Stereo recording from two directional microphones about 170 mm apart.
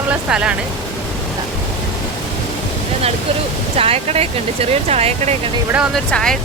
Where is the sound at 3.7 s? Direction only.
35° right (ahead or behind).